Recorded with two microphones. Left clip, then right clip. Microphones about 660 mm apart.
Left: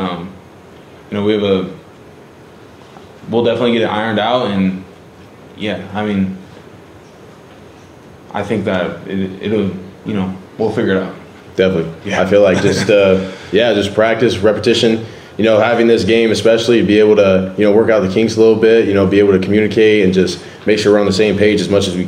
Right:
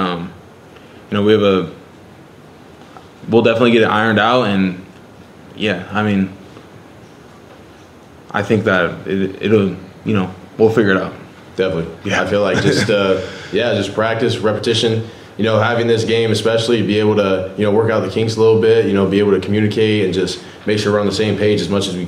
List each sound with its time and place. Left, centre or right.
1.1 s speech: right
3.3 s speech: right
8.3 s speech: right
11.6 s a man's voice: centre